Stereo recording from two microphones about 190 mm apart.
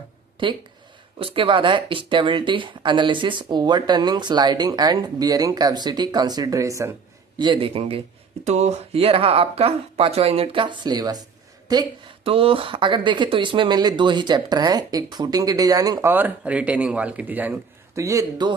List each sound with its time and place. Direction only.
1.2 s speech: 25° right (ahead or behind)